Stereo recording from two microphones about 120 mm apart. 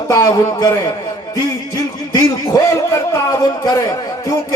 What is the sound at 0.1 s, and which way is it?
Speech, 30° left (ahead or behind).